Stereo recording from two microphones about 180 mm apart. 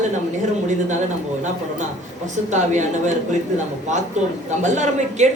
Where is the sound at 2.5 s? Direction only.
40° right (ahead or behind).